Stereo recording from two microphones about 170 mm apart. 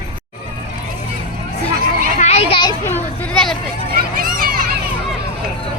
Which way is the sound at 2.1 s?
40° left (ahead or behind).